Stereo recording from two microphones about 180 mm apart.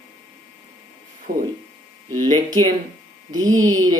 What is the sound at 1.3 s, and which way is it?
Speech, 55° right (ahead or behind).